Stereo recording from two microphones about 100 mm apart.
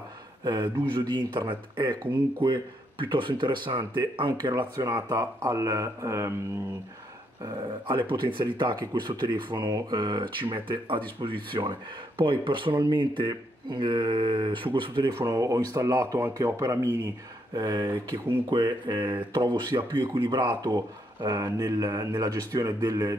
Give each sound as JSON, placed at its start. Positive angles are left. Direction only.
{"t": 0.4, "sound": "speech", "side_deg": -50}
{"t": 4.7, "sound": "speech", "side_deg": -35}
{"t": 7.4, "sound": "speech", "side_deg": -50}
{"t": 15.1, "sound": "speech", "side_deg": -35}
{"t": 17.6, "sound": "speech", "side_deg": -45}
{"t": 17.8, "sound": "speech", "side_deg": -20}
{"t": 18.5, "sound": "speech", "side_deg": -55}